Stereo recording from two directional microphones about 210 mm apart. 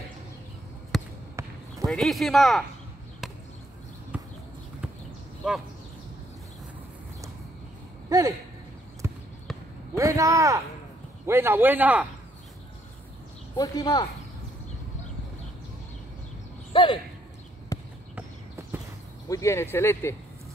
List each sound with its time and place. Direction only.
0.9 s basketball bounce: centre (ahead or behind)
1.9 s speech: centre (ahead or behind)
4.1 s horse: 10° right (ahead or behind)
8.1 s speech: 15° right (ahead or behind)
9.0 s basketball bounce: 10° right (ahead or behind)
9.9 s a man's voice: 15° right (ahead or behind)
13.6 s speech: 20° left (ahead or behind)
16.7 s speech: 25° left (ahead or behind)
17.7 s a sound: 15° left (ahead or behind)
18.1 s horse: 10° right (ahead or behind)
19.2 s speech: 15° left (ahead or behind)